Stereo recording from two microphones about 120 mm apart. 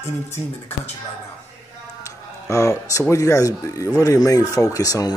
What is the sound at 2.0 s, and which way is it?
Speech, 25° left (ahead or behind).